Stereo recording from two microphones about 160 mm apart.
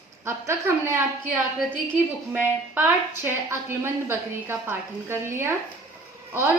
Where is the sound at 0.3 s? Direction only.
15° right (ahead or behind).